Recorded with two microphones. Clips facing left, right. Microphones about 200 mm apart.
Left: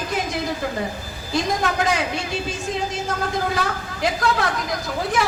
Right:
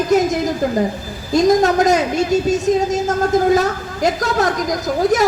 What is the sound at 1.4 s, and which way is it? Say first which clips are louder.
A woman's voice: right 11 dB; 40° right (ahead or behind).